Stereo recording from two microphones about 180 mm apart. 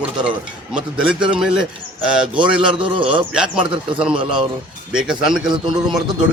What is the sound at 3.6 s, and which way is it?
Speech, 25° right (ahead or behind).